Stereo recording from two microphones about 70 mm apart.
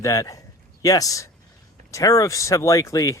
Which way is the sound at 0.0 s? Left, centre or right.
Left.